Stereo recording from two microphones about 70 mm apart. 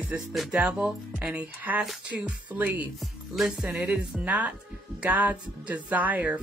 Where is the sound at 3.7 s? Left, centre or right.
Centre.